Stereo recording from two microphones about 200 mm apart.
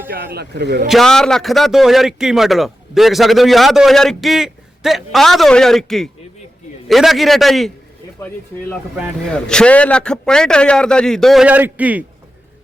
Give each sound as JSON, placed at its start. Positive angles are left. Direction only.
{"t": 0.3, "sound": "a man's voice", "side_deg": -55}
{"t": 0.9, "sound": "a man's voice", "side_deg": 0}
{"t": 9.3, "sound": "a man's voice", "side_deg": 5}